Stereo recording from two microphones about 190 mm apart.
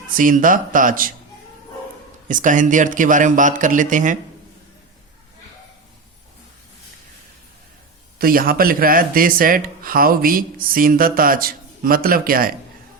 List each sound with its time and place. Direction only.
0.1 s speech: 45° right (ahead or behind)
2.2 s speech: 40° right (ahead or behind)
8.2 s speech: 50° right (ahead or behind)